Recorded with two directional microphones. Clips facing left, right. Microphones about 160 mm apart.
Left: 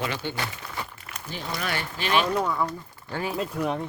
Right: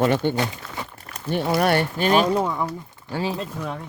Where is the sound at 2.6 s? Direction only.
10° right (ahead or behind).